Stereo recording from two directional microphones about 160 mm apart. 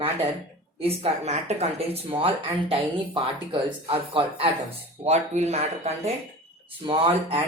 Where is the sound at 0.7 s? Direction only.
40° right (ahead or behind).